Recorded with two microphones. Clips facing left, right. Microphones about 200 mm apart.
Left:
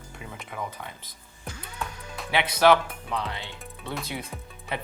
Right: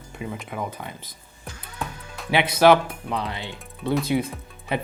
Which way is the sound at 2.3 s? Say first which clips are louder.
Right 4 dB; 10° right (ahead or behind).